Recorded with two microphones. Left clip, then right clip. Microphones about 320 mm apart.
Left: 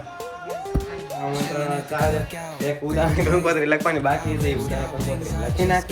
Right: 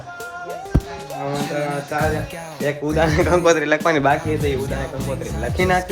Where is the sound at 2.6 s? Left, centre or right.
Centre.